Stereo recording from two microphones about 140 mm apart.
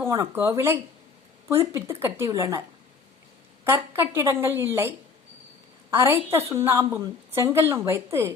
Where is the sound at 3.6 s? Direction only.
15° right (ahead or behind).